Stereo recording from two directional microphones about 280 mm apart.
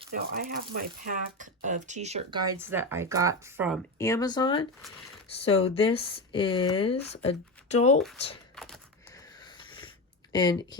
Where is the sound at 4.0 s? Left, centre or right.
Centre.